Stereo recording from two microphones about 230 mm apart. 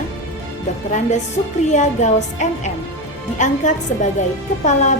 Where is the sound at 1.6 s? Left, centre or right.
Left.